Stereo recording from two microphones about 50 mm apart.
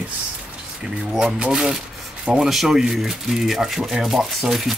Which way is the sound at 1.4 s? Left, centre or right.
Centre.